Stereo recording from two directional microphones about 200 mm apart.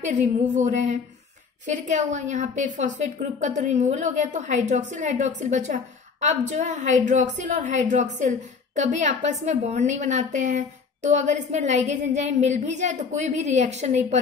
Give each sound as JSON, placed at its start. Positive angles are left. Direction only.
{"t": 0.0, "sound": "a woman's voice", "side_deg": -35}